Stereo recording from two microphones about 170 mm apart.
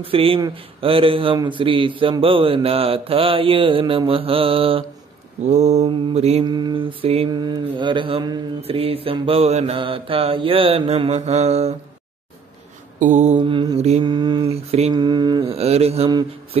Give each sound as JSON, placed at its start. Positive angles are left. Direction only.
{"t": 0.0, "sound": "speech", "side_deg": -35}
{"t": 5.4, "sound": "mantra", "side_deg": -40}
{"t": 5.9, "sound": "speech", "side_deg": -35}
{"t": 6.4, "sound": "mantra", "side_deg": -25}
{"t": 8.6, "sound": "speech", "side_deg": -35}
{"t": 13.0, "sound": "mantra", "side_deg": -45}
{"t": 13.4, "sound": "mantra", "side_deg": -30}
{"t": 14.0, "sound": "mantra", "side_deg": -25}
{"t": 15.5, "sound": "speech", "side_deg": -35}